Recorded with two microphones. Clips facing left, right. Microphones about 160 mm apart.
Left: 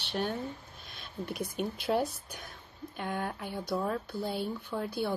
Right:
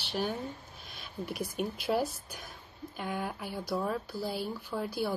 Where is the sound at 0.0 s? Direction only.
5° right (ahead or behind).